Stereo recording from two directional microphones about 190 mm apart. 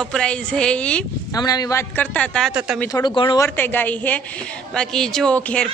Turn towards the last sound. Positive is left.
turn(degrees=5)  # may be behind; listen again after turning